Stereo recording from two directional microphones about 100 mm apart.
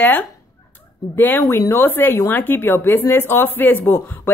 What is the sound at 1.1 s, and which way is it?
Speech, 20° left (ahead or behind).